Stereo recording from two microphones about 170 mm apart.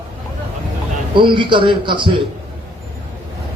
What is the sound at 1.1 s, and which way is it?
Speech, 30° right (ahead or behind).